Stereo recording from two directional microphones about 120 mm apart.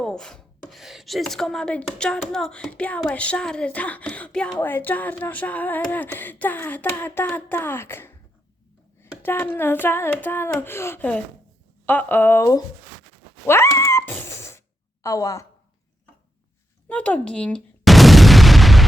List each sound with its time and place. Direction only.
0.0 s speech: 5° left (ahead or behind); by 12.6 s 25° left (ahead or behind)
13.5 s cat: 25° left (ahead or behind)
15.0 s a woman's voice: 25° left (ahead or behind)
16.9 s a sound: 10° left (ahead or behind)